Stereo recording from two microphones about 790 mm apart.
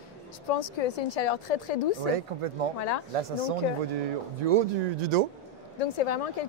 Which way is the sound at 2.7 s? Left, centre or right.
Left.